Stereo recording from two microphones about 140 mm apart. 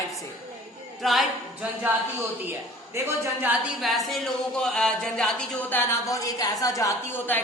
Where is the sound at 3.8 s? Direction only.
Centre (ahead or behind).